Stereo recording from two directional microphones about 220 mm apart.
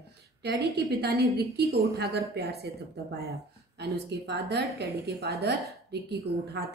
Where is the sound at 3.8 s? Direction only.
50° right (ahead or behind).